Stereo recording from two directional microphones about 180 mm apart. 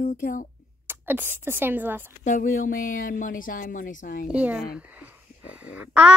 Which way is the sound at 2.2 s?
50° left (ahead or behind).